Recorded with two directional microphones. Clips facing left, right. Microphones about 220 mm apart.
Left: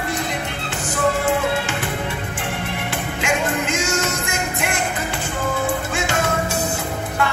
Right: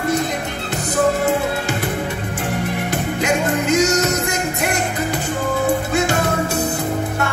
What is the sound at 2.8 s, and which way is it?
Music, 40° right (ahead or behind).